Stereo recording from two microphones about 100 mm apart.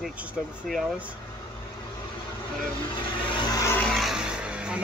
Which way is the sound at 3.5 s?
30° left (ahead or behind).